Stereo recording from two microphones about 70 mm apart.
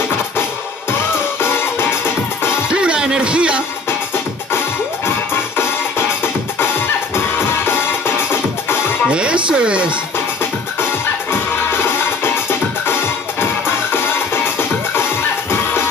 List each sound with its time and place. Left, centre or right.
1.4 s music: left
2.7 s music: centre
5.0 s music: left
9.1 s a sound: centre
11.7 s music: left